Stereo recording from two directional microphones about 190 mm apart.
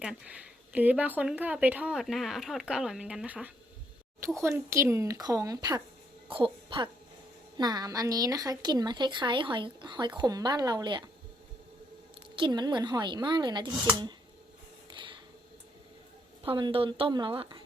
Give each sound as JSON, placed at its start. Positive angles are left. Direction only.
{"t": 0.0, "sound": "a woman's voice", "side_deg": -5}
{"t": 12.4, "sound": "a woman's voice", "side_deg": -20}
{"t": 14.9, "sound": "mechanisms", "side_deg": -25}
{"t": 16.4, "sound": "a woman's voice", "side_deg": -25}